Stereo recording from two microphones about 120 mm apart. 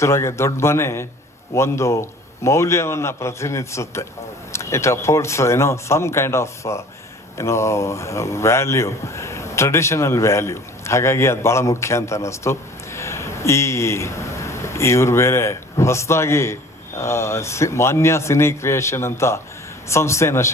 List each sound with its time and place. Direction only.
0.0 s a man's voice: 25° left (ahead or behind)